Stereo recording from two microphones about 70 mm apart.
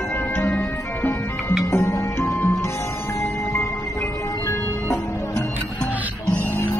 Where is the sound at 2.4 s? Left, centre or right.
Left.